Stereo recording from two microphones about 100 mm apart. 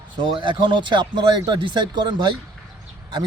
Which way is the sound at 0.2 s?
55° right (ahead or behind).